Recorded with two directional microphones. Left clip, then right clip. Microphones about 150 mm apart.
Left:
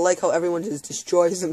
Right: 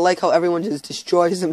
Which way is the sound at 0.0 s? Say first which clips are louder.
Right 4 dB; 30° right (ahead or behind).